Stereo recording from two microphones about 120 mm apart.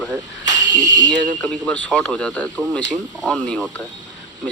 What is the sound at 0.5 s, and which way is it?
Speech, 35° right (ahead or behind).